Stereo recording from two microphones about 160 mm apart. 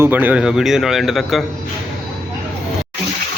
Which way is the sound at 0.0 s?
10° right (ahead or behind).